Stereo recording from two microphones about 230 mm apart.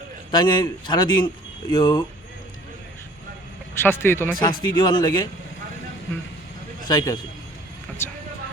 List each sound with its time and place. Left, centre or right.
0.3 s a man's voice: centre
3.8 s a man's voice: centre
6.8 s speech: centre
8.0 s vehicle: centre